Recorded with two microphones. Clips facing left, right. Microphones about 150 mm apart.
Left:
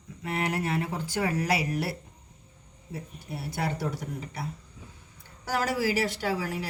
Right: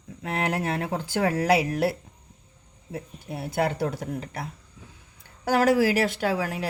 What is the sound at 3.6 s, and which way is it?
Speech, 80° right.